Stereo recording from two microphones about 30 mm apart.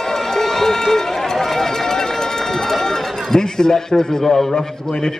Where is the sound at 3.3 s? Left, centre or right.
Left.